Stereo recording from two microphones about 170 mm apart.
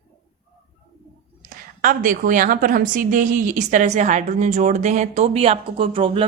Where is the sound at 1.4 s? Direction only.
55° right (ahead or behind).